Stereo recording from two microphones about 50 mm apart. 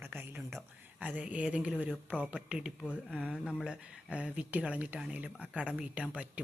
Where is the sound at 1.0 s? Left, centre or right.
Right.